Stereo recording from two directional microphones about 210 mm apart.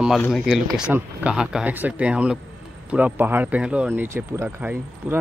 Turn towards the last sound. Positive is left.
turn(degrees=-10)  # may be behind; listen again after turning